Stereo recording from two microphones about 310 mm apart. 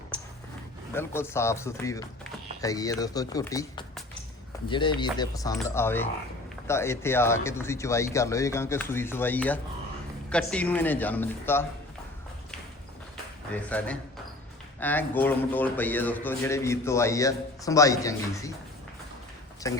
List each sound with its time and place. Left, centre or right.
0.9 s a man's voice: centre
13.5 s a man's voice: centre
19.6 s speech: centre